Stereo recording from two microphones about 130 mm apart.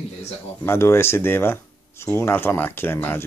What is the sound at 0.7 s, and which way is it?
Speech, 20° left (ahead or behind).